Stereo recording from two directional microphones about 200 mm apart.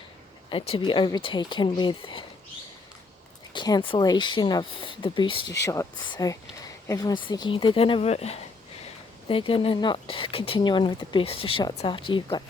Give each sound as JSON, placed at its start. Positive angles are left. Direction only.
{"t": 0.5, "sound": "speech", "side_deg": 25}
{"t": 3.5, "sound": "speech", "side_deg": 20}